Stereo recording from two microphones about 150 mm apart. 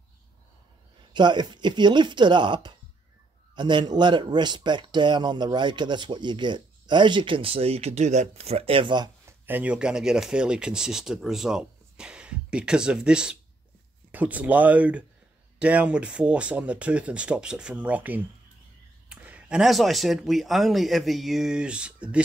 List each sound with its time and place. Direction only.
1.1 s a man's voice: 30° right (ahead or behind)
9.2 s speech: 10° right (ahead or behind)